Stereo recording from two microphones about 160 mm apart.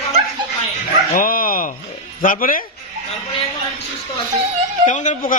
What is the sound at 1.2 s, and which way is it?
Dog, 60° left (ahead or behind).